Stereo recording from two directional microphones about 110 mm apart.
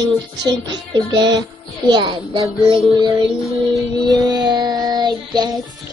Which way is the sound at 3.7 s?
35° right (ahead or behind).